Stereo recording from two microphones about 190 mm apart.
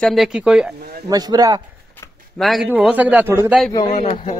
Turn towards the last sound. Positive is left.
turn(degrees=30)  # may be behind; listen again after turning